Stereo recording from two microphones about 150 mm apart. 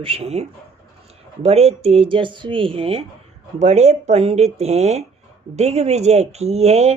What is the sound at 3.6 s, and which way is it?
A woman's voice, 50° right (ahead or behind).